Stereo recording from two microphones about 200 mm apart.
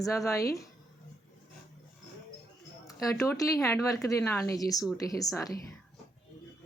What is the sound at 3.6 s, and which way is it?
A woman's voice, 15° left (ahead or behind).